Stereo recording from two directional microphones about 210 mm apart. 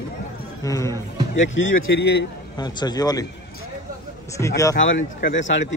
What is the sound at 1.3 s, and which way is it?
Speech, 60° left (ahead or behind).